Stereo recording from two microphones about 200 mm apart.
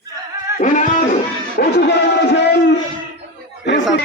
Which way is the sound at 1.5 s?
50° left (ahead or behind).